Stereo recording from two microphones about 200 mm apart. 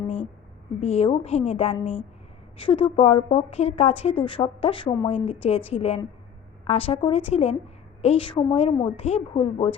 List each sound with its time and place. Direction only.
0.8 s a woman's voice: 30° left (ahead or behind)